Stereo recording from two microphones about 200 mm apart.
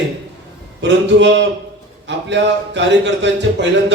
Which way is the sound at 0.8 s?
60° right (ahead or behind).